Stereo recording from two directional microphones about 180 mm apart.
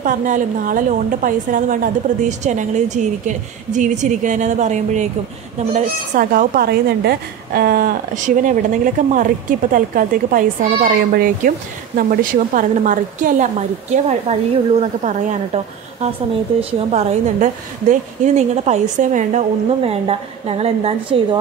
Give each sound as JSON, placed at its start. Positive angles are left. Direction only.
{"t": 0.0, "sound": "a woman's voice", "side_deg": -45}
{"t": 6.1, "sound": "a woman's voice", "side_deg": -55}